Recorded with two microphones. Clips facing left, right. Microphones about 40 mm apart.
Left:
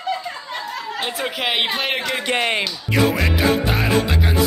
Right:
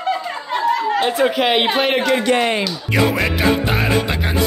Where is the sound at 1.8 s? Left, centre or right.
Centre.